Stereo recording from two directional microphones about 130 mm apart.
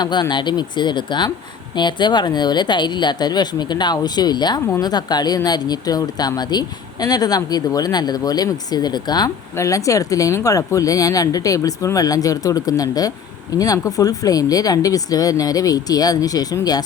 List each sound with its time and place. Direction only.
0.0 s speech: 35° left (ahead or behind)
4.6 s speech: 20° left (ahead or behind)
4.9 s speech: 30° left (ahead or behind)